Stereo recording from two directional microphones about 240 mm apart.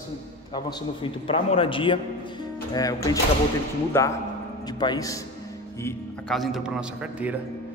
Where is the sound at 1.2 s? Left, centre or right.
Left; by 7.3 s centre.